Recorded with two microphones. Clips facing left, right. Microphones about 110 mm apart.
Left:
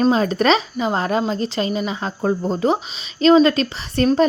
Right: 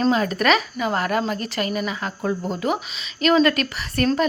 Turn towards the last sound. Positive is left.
turn(degrees=25)  # may be behind; listen again after turning